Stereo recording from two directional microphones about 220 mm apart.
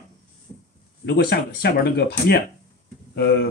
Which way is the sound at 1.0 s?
45° left (ahead or behind).